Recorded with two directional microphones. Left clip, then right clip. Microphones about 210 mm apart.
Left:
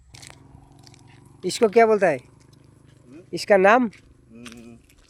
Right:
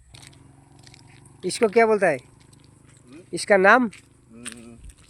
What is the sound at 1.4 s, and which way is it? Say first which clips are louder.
Purr: left 2 dB; centre (ahead or behind).